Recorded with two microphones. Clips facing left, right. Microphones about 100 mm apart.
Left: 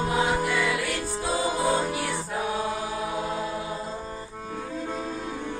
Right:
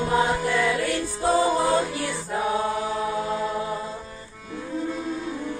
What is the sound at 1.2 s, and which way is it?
Music, 45° right (ahead or behind).